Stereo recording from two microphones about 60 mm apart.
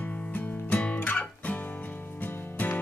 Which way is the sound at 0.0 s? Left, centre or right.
Left.